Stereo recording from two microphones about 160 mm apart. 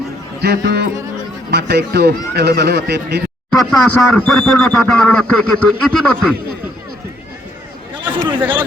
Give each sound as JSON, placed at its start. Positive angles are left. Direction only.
{"t": 0.4, "sound": "speech", "side_deg": -90}
{"t": 3.5, "sound": "speech", "side_deg": 0}
{"t": 8.4, "sound": "speech", "side_deg": -10}